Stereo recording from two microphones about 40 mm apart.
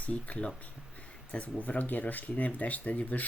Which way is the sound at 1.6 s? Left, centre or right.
Left.